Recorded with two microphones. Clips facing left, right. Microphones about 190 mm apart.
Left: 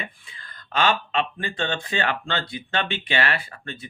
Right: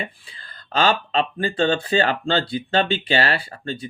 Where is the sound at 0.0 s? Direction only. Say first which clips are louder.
Right 5 dB; 35° right (ahead or behind).